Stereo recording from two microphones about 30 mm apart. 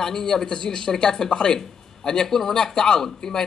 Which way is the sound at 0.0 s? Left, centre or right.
Centre.